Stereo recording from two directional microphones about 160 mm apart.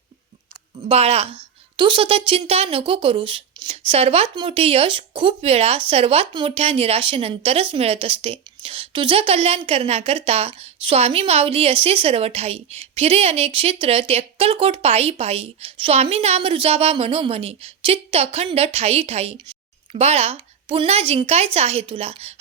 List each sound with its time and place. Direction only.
0.8 s speech: 40° right (ahead or behind)